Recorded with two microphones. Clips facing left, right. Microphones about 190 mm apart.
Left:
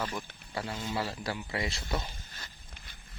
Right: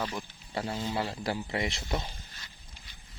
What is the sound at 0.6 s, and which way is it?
A man's voice, 25° right (ahead or behind).